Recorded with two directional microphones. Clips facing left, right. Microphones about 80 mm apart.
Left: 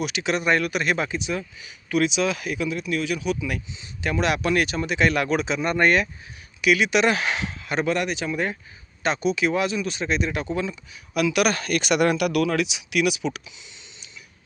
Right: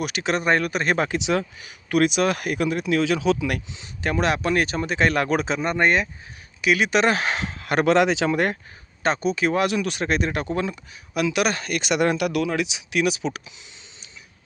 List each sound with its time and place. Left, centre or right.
0.0 s speech: right
1.1 s speech: right
1.6 s speech: right
4.0 s speech: right
5.6 s speech: right
7.7 s speech: right
9.0 s speech: right
9.6 s speech: right
11.1 s speech: right